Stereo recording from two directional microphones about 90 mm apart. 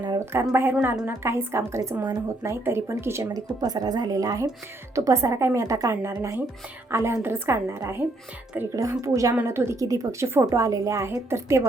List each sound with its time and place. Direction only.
0.5 s a woman's voice: 20° right (ahead or behind)
3.2 s a woman's voice: 45° right (ahead or behind); by 8.0 s 30° right (ahead or behind)
8.7 s a woman's voice: 40° right (ahead or behind)
9.3 s a woman's voice: 25° right (ahead or behind)